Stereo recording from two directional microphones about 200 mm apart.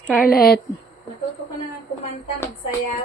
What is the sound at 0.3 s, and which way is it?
Speech, 50° left (ahead or behind).